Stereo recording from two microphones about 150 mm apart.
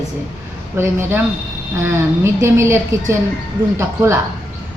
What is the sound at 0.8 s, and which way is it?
A woman's voice, 15° right (ahead or behind).